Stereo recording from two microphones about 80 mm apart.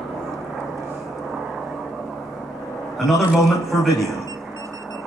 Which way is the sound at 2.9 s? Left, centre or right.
Centre.